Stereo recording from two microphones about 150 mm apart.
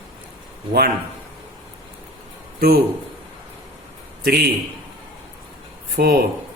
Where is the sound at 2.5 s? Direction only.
90° right.